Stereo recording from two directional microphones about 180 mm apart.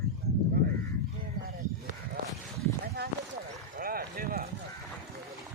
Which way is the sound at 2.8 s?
60° right (ahead or behind).